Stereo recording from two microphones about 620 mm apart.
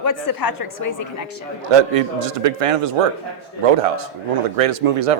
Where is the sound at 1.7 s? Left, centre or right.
Right.